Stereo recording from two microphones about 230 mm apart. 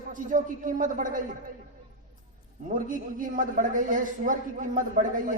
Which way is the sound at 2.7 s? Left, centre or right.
Right.